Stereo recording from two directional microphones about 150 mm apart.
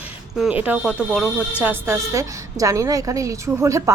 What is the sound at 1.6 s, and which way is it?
A woman's voice, 15° right (ahead or behind).